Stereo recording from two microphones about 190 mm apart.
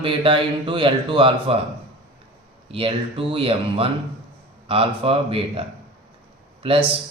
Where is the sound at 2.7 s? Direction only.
30° right (ahead or behind).